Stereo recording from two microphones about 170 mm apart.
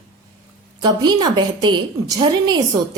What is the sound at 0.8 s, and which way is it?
A woman's voice, 25° right (ahead or behind).